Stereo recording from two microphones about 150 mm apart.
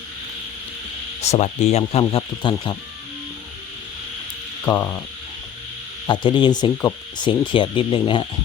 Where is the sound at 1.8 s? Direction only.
40° left (ahead or behind).